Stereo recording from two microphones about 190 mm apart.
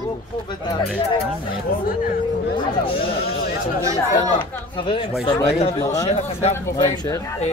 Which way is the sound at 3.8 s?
15° right (ahead or behind).